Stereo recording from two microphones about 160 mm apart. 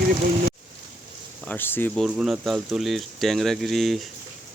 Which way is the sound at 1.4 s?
10° left (ahead or behind).